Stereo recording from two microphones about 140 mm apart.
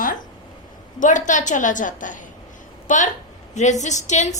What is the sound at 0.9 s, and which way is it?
A woman's voice, 65° left (ahead or behind).